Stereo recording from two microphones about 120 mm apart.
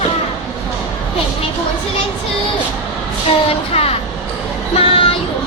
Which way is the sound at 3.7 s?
55° left (ahead or behind).